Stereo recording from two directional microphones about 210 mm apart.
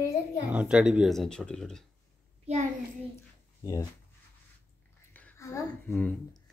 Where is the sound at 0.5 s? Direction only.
5° right (ahead or behind).